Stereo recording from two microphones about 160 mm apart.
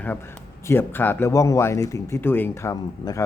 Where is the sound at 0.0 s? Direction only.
15° left (ahead or behind).